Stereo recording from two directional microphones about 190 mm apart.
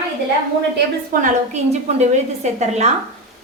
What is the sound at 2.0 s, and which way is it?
Speech, 35° right (ahead or behind).